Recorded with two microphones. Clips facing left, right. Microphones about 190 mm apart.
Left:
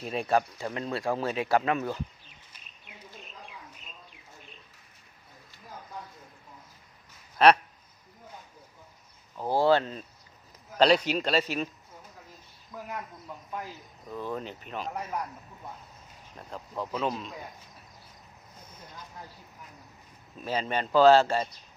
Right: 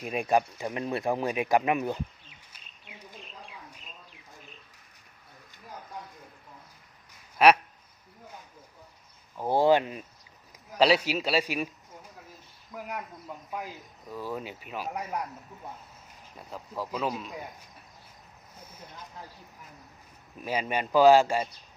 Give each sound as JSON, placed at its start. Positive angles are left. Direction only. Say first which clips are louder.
{"t": 0.0, "sound": "speech", "louder": "right 1 dB", "side_deg": -15}
{"t": 7.3, "sound": "speech", "louder": "even", "side_deg": -10}
{"t": 9.4, "sound": "speech", "louder": "right 1 dB", "side_deg": -15}
{"t": 12.7, "sound": "speech", "louder": "right 1 dB", "side_deg": -10}
{"t": 16.4, "sound": "speech", "louder": "even", "side_deg": -5}
{"t": 20.4, "sound": "speech", "louder": "even", "side_deg": -10}